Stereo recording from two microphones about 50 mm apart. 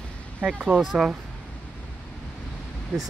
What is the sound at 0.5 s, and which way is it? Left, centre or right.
Speech, right.